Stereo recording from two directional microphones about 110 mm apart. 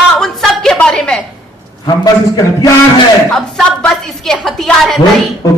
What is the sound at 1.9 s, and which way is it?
Speech, 35° left (ahead or behind).